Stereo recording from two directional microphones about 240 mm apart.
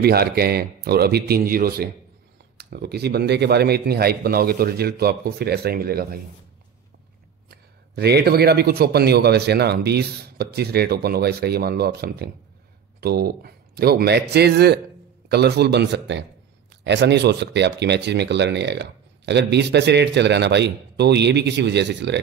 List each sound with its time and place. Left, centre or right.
0.0 s a man's voice: right
7.4 s a man's voice: right